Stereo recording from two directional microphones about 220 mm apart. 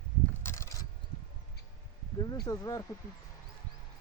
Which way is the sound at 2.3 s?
15° left (ahead or behind).